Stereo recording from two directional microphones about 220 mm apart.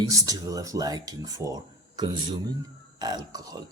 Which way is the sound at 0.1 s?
15° right (ahead or behind).